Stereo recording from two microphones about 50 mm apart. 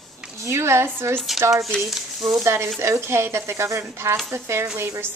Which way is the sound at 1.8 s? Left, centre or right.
Centre.